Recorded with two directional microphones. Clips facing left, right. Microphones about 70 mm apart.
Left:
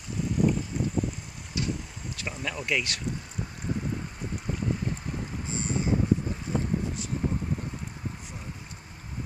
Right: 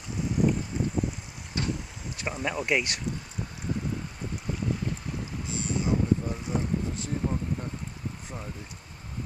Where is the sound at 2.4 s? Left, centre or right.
Right.